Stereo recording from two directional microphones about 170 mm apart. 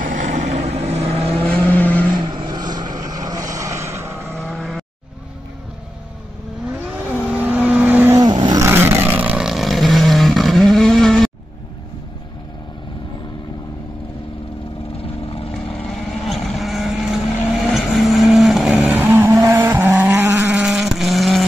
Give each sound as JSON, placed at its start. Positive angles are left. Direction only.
{"t": 0.0, "sound": "vehicle", "side_deg": -50}
{"t": 1.5, "sound": "vehicle", "side_deg": 10}
{"t": 2.1, "sound": "vehicle", "side_deg": -25}
{"t": 4.4, "sound": "vehicle", "side_deg": 0}
{"t": 6.7, "sound": "vehicle", "side_deg": -10}
{"t": 8.3, "sound": "roar", "side_deg": -25}
{"t": 8.6, "sound": "vehicle", "side_deg": -15}
{"t": 16.3, "sound": "vehicle", "side_deg": 0}
{"t": 18.9, "sound": "vehicle", "side_deg": -15}
{"t": 20.6, "sound": "vehicle", "side_deg": -5}